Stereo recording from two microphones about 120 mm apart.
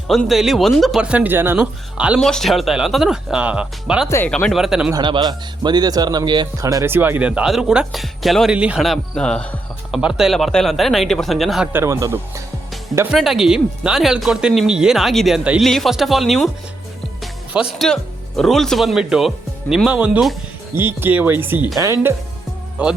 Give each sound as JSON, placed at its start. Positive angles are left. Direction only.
{"t": 0.1, "sound": "speech", "side_deg": 0}
{"t": 2.1, "sound": "speech", "side_deg": 5}
{"t": 4.3, "sound": "speech", "side_deg": 5}
{"t": 4.5, "sound": "speech", "side_deg": -5}
{"t": 4.9, "sound": "speech", "side_deg": -35}
{"t": 8.5, "sound": "speech", "side_deg": -10}
{"t": 8.8, "sound": "speech", "side_deg": 5}
{"t": 9.9, "sound": "speech", "side_deg": -5}
{"t": 11.7, "sound": "speech", "side_deg": -25}
{"t": 13.1, "sound": "speech", "side_deg": -5}
{"t": 17.2, "sound": "music", "side_deg": -5}
{"t": 17.8, "sound": "speech", "side_deg": 5}
{"t": 22.8, "sound": "speech", "side_deg": -10}